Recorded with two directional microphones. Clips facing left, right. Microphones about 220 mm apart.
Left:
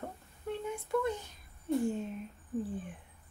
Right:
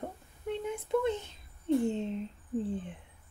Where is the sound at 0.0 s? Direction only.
20° right (ahead or behind).